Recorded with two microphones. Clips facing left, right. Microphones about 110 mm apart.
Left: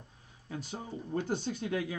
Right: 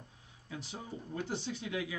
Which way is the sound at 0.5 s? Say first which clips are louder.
Left 3 dB; 45° left (ahead or behind).